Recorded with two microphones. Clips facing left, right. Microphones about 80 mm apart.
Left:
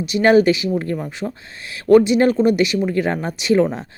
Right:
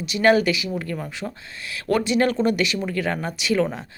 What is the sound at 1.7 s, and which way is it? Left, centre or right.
Speech, left.